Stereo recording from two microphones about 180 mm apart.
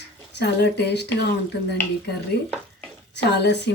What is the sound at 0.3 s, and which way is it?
Speech, 70° left (ahead or behind).